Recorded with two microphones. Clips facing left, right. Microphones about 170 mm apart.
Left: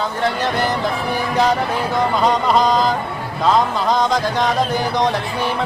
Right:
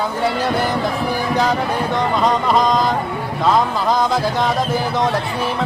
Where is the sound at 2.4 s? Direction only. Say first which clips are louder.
Even; centre (ahead or behind).